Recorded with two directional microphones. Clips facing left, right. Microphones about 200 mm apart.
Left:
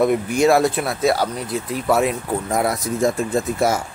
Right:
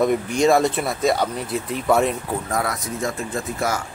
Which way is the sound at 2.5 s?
20° left (ahead or behind).